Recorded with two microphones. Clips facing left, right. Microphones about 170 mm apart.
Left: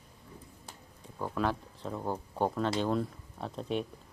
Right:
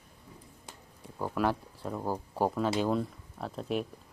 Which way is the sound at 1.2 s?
10° right (ahead or behind).